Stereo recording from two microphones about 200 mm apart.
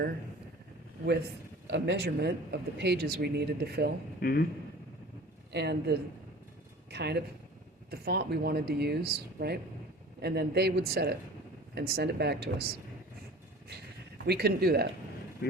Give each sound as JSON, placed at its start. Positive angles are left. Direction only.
{"t": 1.0, "sound": "a man's voice", "side_deg": -55}
{"t": 4.2, "sound": "speech", "side_deg": 50}
{"t": 5.5, "sound": "a man's voice", "side_deg": -55}
{"t": 14.3, "sound": "speech", "side_deg": -50}